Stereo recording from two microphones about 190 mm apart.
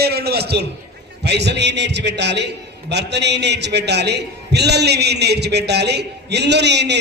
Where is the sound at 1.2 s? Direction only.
65° right (ahead or behind).